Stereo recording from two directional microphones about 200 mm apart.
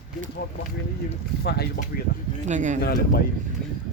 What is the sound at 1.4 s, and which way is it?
Speech, 50° left (ahead or behind).